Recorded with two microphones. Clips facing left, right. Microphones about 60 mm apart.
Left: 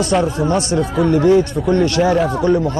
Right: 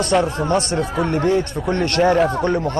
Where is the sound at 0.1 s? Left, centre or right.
Centre.